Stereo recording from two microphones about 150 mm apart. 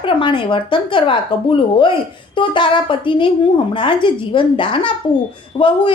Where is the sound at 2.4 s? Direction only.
35° left (ahead or behind).